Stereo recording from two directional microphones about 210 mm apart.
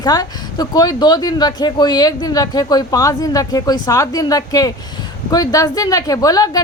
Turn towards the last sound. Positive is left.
turn(degrees=15)  # may be behind; listen again after turning